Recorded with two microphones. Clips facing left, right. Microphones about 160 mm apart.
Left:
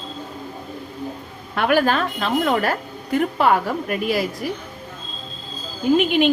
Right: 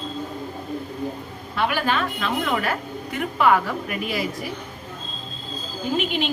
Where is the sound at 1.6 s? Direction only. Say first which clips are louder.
Left 5 dB; 50° left (ahead or behind).